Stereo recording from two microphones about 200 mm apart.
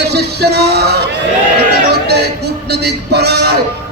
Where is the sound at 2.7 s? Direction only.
55° right (ahead or behind).